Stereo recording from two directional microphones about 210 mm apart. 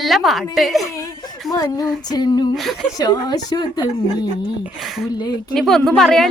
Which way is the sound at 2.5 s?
Centre (ahead or behind).